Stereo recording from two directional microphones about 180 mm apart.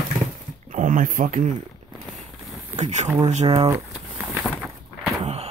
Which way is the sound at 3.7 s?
15° right (ahead or behind).